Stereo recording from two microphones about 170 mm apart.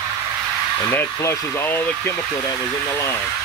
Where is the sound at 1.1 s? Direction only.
20° left (ahead or behind).